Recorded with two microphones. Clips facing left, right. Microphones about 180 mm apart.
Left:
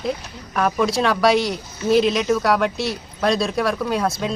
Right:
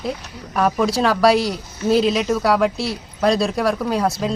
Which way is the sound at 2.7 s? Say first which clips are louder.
Even; 30° right (ahead or behind).